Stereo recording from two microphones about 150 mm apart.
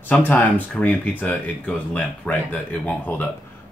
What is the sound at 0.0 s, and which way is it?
Speech, 10° left (ahead or behind).